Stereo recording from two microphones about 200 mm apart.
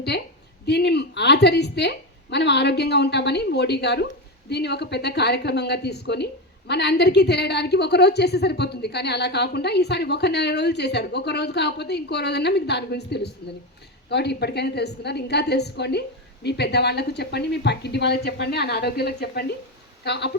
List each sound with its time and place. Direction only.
0.6 s a woman's voice: 55° left (ahead or behind)